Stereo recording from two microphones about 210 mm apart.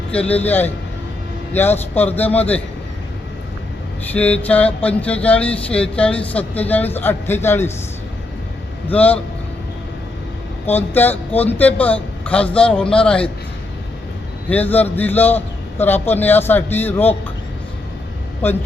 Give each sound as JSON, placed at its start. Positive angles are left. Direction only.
{"t": 0.1, "sound": "a man's voice", "side_deg": 5}
{"t": 4.1, "sound": "a man's voice", "side_deg": 5}
{"t": 8.9, "sound": "a man's voice", "side_deg": 5}
{"t": 10.7, "sound": "a man's voice", "side_deg": 10}
{"t": 14.5, "sound": "a man's voice", "side_deg": 10}
{"t": 18.4, "sound": "a man's voice", "side_deg": 10}